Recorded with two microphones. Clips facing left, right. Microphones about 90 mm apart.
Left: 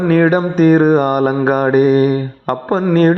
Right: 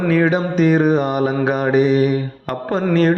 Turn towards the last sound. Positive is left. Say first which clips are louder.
# left 4 dB
turn(degrees=45)  # may be behind; listen again after turning